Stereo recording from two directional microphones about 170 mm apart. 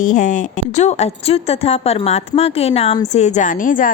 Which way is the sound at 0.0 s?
50° left (ahead or behind).